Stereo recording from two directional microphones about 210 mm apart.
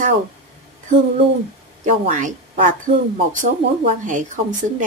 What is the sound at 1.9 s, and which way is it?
A woman's voice, 35° right (ahead or behind).